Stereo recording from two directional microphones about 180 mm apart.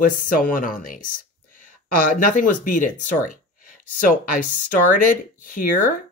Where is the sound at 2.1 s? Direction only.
50° left (ahead or behind).